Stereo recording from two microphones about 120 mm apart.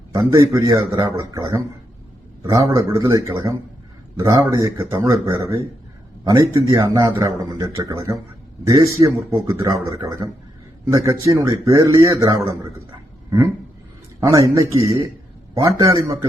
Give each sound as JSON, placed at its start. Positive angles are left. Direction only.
{"t": 0.1, "sound": "a man's voice", "side_deg": -25}
{"t": 14.2, "sound": "speech", "side_deg": -30}